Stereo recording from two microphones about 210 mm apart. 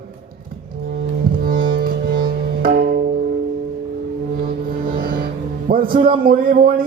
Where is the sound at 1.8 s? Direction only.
45° right (ahead or behind).